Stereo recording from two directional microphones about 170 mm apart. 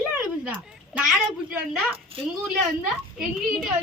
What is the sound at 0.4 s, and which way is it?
Speech, 5° right (ahead or behind).